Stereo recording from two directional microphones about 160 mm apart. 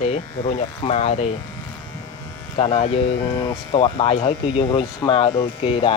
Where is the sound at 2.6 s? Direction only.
40° left (ahead or behind).